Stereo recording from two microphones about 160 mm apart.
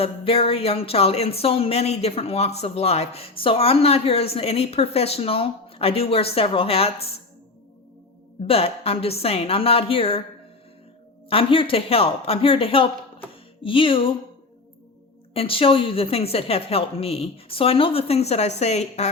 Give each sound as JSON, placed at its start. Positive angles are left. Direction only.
{"t": 0.0, "sound": "speech", "side_deg": 35}
{"t": 8.4, "sound": "speech", "side_deg": 40}
{"t": 11.3, "sound": "speech", "side_deg": 35}
{"t": 15.3, "sound": "speech", "side_deg": 35}